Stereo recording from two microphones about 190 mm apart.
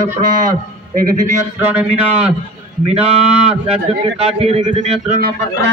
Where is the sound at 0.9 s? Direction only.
45° right (ahead or behind).